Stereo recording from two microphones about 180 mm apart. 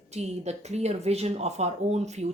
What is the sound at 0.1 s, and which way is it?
Speech, 35° right (ahead or behind).